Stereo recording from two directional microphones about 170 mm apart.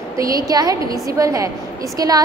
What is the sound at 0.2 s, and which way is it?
A woman's voice, 20° right (ahead or behind).